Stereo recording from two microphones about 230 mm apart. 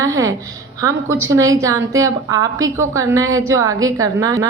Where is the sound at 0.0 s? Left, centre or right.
Centre.